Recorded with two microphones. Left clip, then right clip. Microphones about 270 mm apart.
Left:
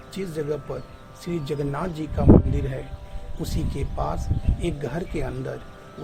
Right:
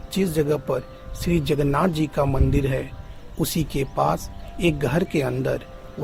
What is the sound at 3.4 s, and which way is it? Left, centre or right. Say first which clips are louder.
Speech: right 7 dB; right.